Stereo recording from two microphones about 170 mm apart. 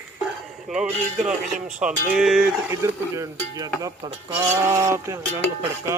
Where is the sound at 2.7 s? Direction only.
20° right (ahead or behind).